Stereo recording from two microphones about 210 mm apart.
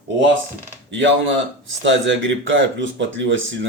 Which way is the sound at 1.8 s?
60° right (ahead or behind).